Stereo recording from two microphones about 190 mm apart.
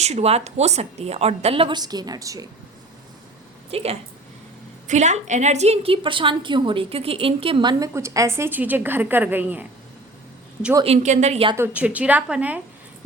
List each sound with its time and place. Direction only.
0.0 s a woman's voice: 35° right (ahead or behind); by 2.5 s 15° right (ahead or behind)
3.7 s a woman's voice: 30° right (ahead or behind); by 9.6 s 10° right (ahead or behind)
10.8 s a woman's voice: 35° right (ahead or behind)
11.5 s a woman's voice: 10° right (ahead or behind)